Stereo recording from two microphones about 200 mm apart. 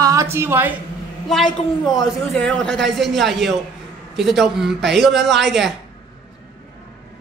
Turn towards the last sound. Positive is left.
turn(degrees=0)  # may be behind; listen again after turning